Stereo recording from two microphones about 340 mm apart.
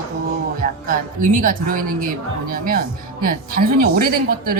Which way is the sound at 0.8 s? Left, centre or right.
Right.